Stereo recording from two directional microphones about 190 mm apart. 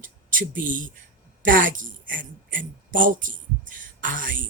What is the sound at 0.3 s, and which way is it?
A woman's voice, 45° right (ahead or behind).